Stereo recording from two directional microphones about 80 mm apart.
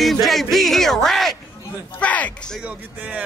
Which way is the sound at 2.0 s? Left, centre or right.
Centre.